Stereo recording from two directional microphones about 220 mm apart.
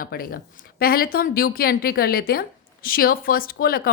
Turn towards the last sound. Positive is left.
turn(degrees=40)  # may be behind; listen again after turning